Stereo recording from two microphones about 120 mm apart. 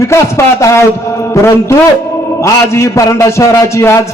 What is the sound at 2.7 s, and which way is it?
A man's voice, 25° left (ahead or behind).